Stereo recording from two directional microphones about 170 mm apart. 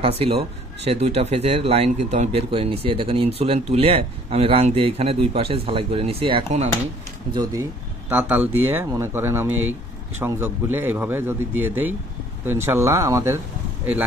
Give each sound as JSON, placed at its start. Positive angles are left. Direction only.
{"t": 0.0, "sound": "speech", "side_deg": -35}
{"t": 8.1, "sound": "speech", "side_deg": -10}